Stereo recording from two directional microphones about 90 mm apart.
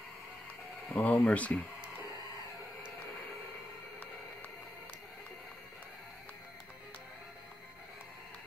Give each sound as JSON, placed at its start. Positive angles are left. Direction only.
{"t": 0.8, "sound": "speech", "side_deg": 15}